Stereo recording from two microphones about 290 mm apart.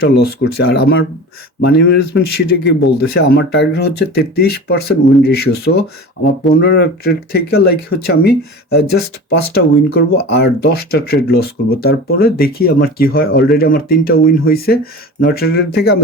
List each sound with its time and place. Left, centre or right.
0.0 s a man's voice: left